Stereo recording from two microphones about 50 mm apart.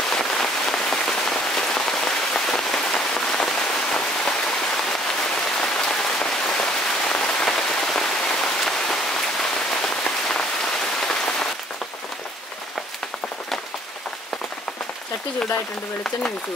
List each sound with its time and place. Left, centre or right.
0.1 s rain on surface: centre
5.6 s rain on surface: centre